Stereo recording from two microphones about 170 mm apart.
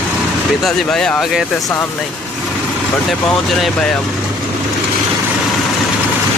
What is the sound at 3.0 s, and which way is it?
Speech, centre (ahead or behind).